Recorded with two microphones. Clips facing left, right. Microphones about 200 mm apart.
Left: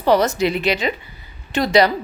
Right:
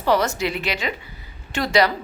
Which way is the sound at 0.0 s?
20° left (ahead or behind).